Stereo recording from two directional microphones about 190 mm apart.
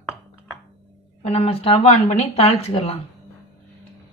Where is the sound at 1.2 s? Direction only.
30° left (ahead or behind).